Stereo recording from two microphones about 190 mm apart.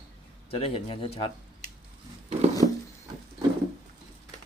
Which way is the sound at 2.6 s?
40° right (ahead or behind).